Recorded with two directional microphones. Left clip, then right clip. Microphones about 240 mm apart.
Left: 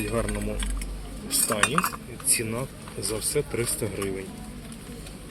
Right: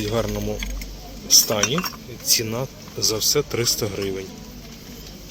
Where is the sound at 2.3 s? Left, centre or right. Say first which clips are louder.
Right 7 dB; centre.